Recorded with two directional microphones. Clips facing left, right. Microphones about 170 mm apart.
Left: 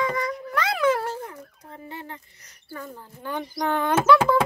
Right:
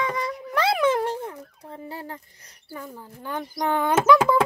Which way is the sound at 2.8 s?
5° right (ahead or behind).